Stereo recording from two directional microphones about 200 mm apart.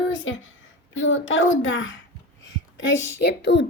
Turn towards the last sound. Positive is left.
turn(degrees=60)  # may be behind; listen again after turning